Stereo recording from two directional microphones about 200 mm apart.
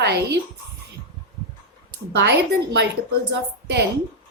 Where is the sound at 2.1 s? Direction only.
60° right (ahead or behind).